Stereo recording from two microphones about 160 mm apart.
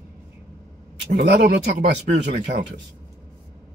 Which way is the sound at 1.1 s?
75° right (ahead or behind).